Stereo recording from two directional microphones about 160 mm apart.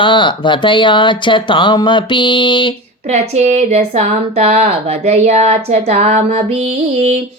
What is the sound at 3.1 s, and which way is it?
A woman's voice, 45° right (ahead or behind).